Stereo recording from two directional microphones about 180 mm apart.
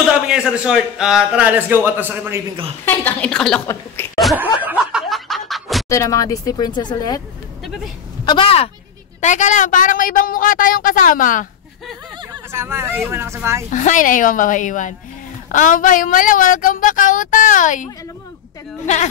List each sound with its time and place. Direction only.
0.1 s a man's voice: 5° right (ahead or behind)
2.8 s a woman's voice: 10° left (ahead or behind)
3.6 s a woman's voice: 15° left (ahead or behind)
4.6 s snicker: 5° right (ahead or behind)
5.9 s speech: 20° left (ahead or behind)
8.3 s speech: 30° left (ahead or behind)
9.2 s a woman's voice: 40° left (ahead or behind)
12.4 s a man's voice: 15° right (ahead or behind)
13.7 s a woman's voice: 45° left (ahead or behind)